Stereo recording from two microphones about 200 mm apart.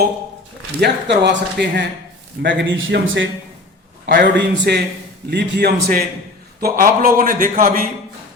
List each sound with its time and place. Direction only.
0.8 s speech: 60° right (ahead or behind)
4.0 s a man's voice: 55° right (ahead or behind)